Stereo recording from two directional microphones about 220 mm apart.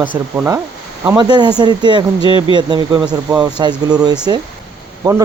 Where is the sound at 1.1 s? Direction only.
20° right (ahead or behind).